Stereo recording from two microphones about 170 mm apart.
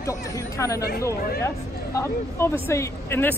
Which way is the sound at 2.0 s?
15° left (ahead or behind).